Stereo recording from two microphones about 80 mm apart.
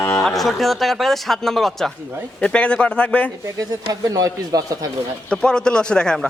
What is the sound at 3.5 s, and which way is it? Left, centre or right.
A man's voice, right.